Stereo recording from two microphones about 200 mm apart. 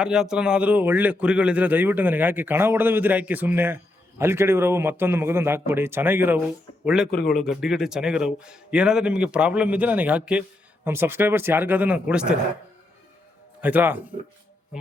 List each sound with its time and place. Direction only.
0.0 s a man's voice: 5° right (ahead or behind)
7.1 s a man's voice: 45° left (ahead or behind)
7.3 s a man's voice: centre (ahead or behind)
13.6 s a man's voice: 10° right (ahead or behind)